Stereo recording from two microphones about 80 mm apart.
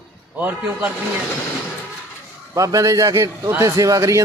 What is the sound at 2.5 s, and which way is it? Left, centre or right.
A man's voice, right.